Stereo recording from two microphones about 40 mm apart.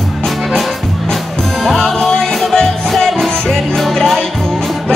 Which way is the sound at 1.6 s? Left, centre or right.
Centre.